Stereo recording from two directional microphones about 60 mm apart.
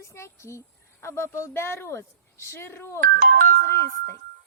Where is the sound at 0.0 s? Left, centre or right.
Left.